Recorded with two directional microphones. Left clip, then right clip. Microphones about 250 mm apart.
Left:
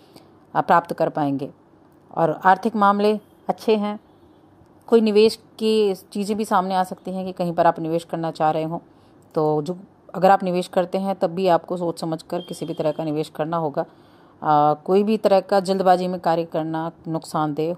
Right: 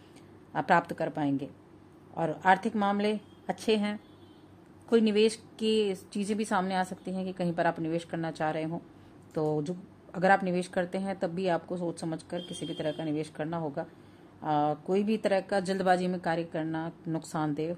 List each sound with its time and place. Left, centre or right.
0.5 s a woman's voice: centre
5.0 s a woman's voice: centre